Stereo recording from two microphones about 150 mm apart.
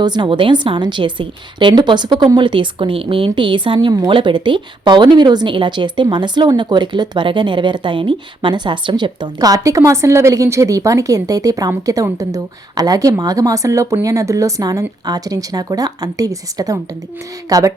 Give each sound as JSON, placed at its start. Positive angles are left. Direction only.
{"t": 0.0, "sound": "a woman's voice", "side_deg": -30}